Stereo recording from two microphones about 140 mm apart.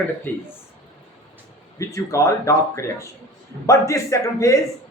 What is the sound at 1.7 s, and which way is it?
Speech, 20° left (ahead or behind).